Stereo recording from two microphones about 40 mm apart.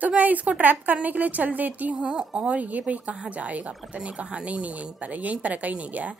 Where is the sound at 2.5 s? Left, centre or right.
Right.